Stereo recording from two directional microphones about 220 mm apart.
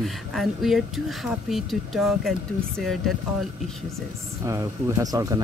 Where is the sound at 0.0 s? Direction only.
Centre (ahead or behind).